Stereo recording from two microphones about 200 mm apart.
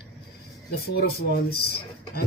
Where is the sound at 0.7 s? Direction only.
50° left (ahead or behind).